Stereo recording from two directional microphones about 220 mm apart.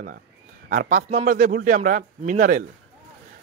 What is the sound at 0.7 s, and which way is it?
Speech, 35° right (ahead or behind).